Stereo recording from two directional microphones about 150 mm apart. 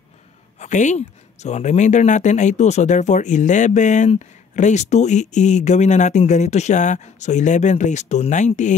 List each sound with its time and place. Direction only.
0.6 s speech: 55° left (ahead or behind)